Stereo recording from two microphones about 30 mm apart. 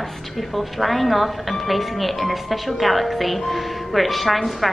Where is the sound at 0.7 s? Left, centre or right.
Centre.